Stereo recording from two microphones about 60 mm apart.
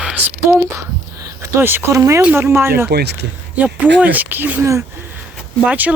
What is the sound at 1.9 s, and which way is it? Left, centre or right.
Speech, right.